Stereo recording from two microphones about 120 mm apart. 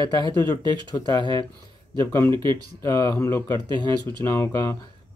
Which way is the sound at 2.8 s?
25° left (ahead or behind).